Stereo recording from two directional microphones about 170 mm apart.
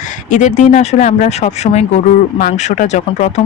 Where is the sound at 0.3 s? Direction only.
45° left (ahead or behind).